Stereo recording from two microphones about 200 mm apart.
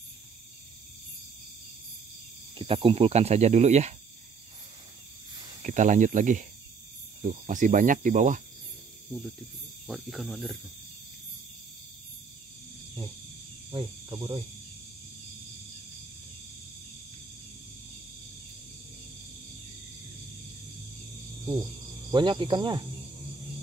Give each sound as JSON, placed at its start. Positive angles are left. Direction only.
{"t": 2.5, "sound": "speech", "side_deg": -25}
{"t": 5.6, "sound": "speech", "side_deg": -40}
{"t": 9.8, "sound": "cricket", "side_deg": 0}
{"t": 13.7, "sound": "speech", "side_deg": -20}
{"t": 22.1, "sound": "speech", "side_deg": -25}